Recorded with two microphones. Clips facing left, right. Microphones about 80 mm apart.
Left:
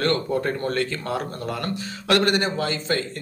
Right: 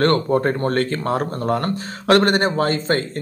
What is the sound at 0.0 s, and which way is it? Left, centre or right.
Speech, right.